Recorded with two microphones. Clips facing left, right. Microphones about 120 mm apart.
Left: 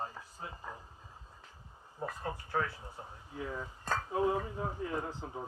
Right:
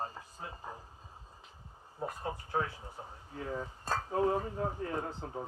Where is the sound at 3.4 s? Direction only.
35° right (ahead or behind).